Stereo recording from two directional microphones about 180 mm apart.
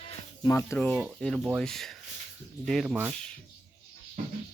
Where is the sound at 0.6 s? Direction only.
10° left (ahead or behind).